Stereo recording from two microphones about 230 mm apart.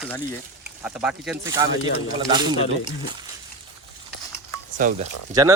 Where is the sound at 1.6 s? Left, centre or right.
Centre.